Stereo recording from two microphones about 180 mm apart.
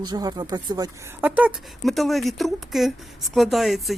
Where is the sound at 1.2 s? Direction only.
10° right (ahead or behind).